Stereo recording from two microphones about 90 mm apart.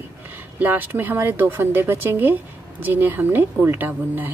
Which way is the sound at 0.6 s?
20° right (ahead or behind).